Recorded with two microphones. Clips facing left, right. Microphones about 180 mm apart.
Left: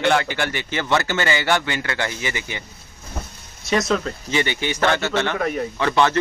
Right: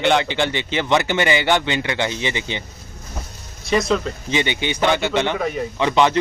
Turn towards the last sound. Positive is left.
turn(degrees=-15)  # may be behind; listen again after turning